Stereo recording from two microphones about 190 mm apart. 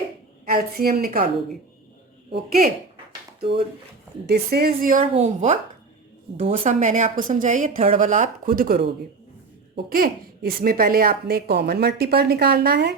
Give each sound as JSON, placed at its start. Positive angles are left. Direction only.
{"t": 0.4, "sound": "a woman's voice", "side_deg": -50}
{"t": 2.3, "sound": "a woman's voice", "side_deg": -50}
{"t": 3.4, "sound": "speech", "side_deg": -30}
{"t": 4.3, "sound": "a woman's voice", "side_deg": -55}
{"t": 6.6, "sound": "a woman's voice", "side_deg": -40}